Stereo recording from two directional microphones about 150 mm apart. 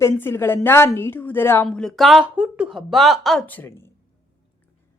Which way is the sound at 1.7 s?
Centre (ahead or behind).